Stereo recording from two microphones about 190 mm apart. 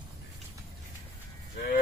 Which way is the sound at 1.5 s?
45° left (ahead or behind).